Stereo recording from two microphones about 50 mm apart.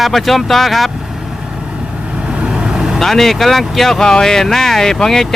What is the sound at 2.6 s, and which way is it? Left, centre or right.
Vehicle, centre.